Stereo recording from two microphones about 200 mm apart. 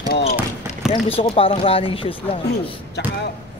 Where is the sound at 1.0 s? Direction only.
30° left (ahead or behind).